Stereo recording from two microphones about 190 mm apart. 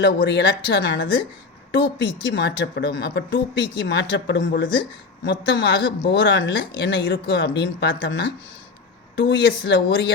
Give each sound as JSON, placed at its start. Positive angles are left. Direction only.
{"t": 0.0, "sound": "a woman's voice", "side_deg": 65}